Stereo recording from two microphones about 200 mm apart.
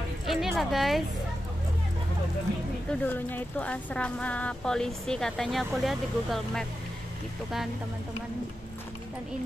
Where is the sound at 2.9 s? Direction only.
10° left (ahead or behind).